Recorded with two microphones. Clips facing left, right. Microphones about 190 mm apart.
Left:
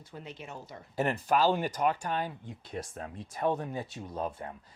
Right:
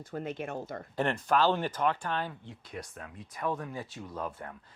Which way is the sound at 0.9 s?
10° left (ahead or behind).